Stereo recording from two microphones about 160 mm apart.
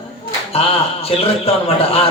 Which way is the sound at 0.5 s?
35° left (ahead or behind).